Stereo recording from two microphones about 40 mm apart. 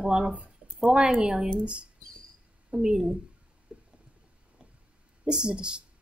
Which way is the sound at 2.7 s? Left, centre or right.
Centre.